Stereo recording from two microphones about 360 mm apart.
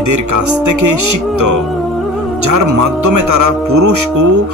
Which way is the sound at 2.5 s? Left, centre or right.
Right.